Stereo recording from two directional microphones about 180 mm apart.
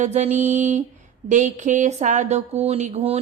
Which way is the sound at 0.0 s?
40° right (ahead or behind).